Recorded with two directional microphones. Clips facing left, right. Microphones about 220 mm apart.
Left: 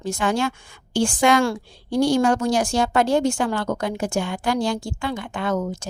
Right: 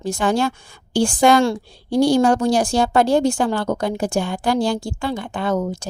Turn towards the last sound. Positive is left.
turn(degrees=-35)  # may be behind; listen again after turning